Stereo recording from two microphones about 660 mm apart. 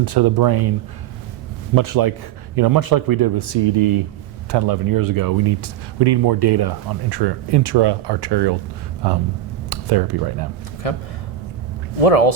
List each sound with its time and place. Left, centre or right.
0.0 s speech: right
1.7 s a man's voice: right
4.5 s speech: right
10.8 s speech: left